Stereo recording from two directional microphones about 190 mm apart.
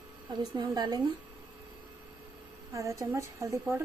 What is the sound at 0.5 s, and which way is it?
Speech, 20° right (ahead or behind).